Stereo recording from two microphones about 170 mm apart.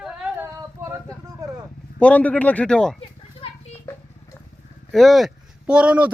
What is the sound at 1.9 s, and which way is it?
A man's voice, 10° left (ahead or behind).